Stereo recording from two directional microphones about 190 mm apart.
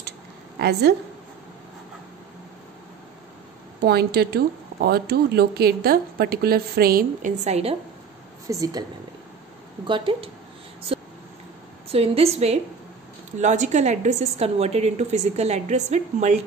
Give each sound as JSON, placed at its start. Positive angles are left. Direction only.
{"t": 0.6, "sound": "speech", "side_deg": -60}
{"t": 3.8, "sound": "speech", "side_deg": -55}
{"t": 8.5, "sound": "a woman's voice", "side_deg": -20}
{"t": 9.8, "sound": "speech", "side_deg": -25}
{"t": 11.9, "sound": "a woman's voice", "side_deg": -30}